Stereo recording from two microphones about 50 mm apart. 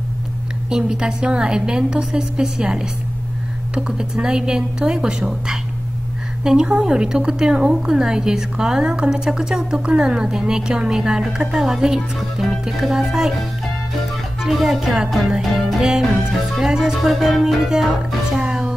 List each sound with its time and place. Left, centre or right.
0.7 s a woman's voice: centre
14.4 s music: centre
15.3 s music: centre